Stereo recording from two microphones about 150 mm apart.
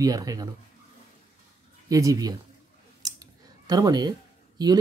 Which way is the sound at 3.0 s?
25° right (ahead or behind).